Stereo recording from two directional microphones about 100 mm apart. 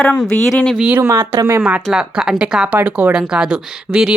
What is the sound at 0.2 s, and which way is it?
Speech, centre (ahead or behind).